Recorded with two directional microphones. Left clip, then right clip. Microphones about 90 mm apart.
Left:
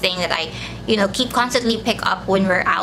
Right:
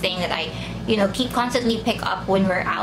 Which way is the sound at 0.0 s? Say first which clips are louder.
Left 3 dB; 35° left (ahead or behind).